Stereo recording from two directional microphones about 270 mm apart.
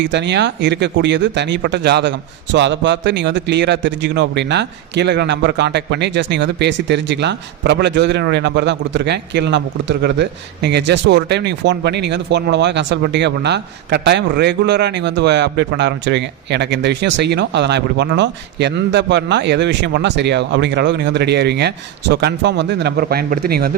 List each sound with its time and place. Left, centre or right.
0.0 s speech: right